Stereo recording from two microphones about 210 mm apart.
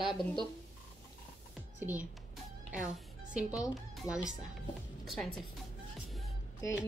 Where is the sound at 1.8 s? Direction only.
5° right (ahead or behind).